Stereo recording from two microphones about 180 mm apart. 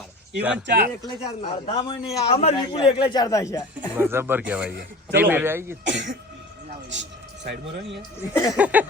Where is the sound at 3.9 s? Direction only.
15° right (ahead or behind).